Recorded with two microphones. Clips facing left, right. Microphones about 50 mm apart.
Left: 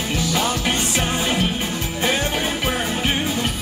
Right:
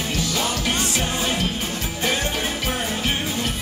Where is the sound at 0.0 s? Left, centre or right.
Left.